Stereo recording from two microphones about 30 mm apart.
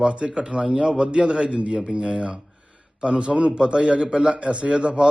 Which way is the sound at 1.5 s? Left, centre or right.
Right.